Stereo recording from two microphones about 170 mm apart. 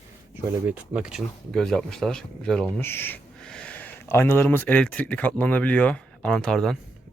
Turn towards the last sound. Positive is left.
turn(degrees=5)  # may be behind; listen again after turning